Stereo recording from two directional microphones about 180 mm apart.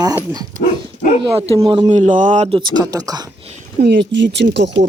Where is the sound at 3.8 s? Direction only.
75° right (ahead or behind).